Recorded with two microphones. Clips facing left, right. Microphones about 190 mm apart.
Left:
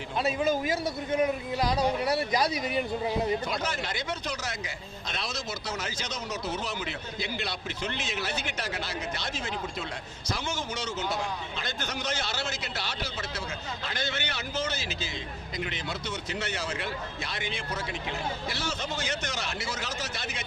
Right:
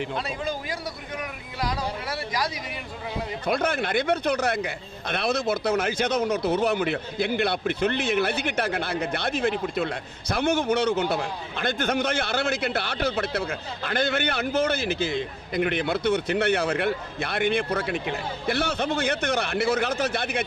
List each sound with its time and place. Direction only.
0.7 s speech: 25° left (ahead or behind)
3.4 s speech: 60° right (ahead or behind)